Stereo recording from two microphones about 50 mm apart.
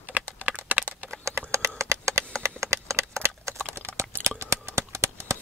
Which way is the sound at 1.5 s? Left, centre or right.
Right.